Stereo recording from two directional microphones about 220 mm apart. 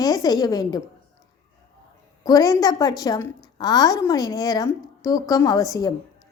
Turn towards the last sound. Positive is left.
turn(degrees=15)  # may be behind; listen again after turning